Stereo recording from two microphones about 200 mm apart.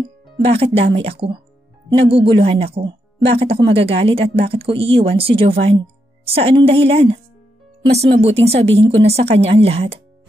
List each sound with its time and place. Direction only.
0.5 s speech: 30° right (ahead or behind)